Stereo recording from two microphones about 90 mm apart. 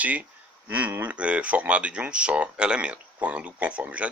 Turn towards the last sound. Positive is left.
turn(degrees=-15)  # may be behind; listen again after turning